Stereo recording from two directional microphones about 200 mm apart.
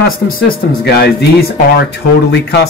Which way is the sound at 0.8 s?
55° left (ahead or behind).